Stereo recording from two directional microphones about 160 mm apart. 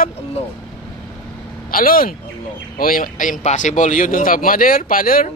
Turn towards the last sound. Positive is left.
turn(degrees=60)  # may be behind; listen again after turning